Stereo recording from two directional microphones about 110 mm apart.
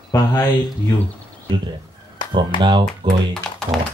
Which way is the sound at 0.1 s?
30° left (ahead or behind).